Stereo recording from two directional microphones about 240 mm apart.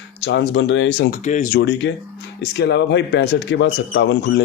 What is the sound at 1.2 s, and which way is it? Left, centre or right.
Speech, left.